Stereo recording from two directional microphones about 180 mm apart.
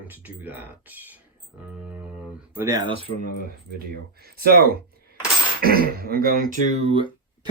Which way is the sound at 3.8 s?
60° right (ahead or behind).